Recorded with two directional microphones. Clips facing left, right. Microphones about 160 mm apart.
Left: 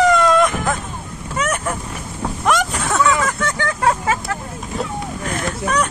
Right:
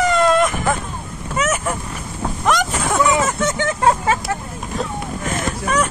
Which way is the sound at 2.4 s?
Centre (ahead or behind).